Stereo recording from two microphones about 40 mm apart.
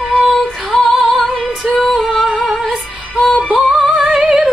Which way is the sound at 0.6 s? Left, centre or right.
Centre.